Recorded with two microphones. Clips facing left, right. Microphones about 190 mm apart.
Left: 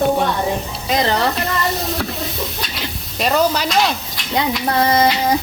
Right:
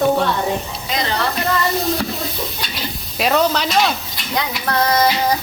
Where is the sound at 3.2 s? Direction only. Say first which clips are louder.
Even; centre (ahead or behind).